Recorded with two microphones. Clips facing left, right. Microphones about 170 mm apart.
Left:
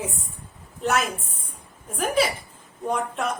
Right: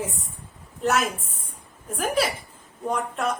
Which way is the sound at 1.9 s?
Centre (ahead or behind).